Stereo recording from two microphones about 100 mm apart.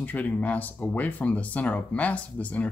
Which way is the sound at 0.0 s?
15° left (ahead or behind).